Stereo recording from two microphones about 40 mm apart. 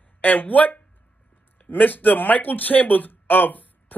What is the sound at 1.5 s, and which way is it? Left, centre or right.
Speech, left.